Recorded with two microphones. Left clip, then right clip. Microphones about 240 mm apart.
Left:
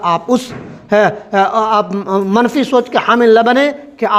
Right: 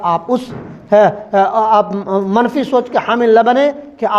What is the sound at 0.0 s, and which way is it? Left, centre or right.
Speech, left.